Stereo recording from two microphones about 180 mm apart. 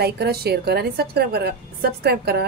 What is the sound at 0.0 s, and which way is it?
A woman's voice, 60° right (ahead or behind).